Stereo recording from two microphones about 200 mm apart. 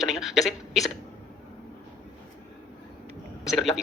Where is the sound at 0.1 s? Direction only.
Centre (ahead or behind).